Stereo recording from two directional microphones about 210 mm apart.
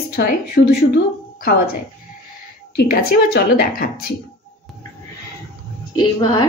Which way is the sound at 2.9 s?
45° left (ahead or behind).